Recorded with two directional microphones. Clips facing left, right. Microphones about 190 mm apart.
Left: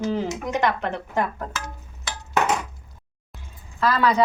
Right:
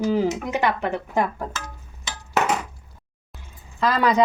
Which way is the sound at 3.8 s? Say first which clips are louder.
Even; 15° right (ahead or behind).